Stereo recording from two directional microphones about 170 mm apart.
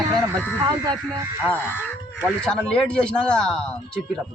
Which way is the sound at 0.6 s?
25° right (ahead or behind).